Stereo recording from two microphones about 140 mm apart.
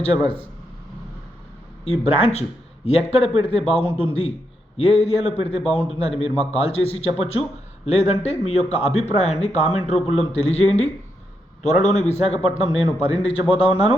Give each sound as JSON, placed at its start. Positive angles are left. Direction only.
{"t": 1.8, "sound": "speech", "side_deg": 45}